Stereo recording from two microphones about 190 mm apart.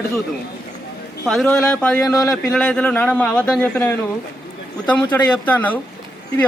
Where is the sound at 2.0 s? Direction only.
20° left (ahead or behind).